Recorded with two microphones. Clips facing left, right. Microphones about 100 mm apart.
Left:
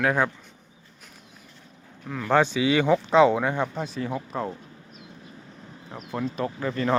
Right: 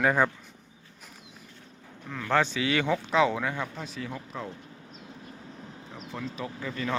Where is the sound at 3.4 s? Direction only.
30° left (ahead or behind).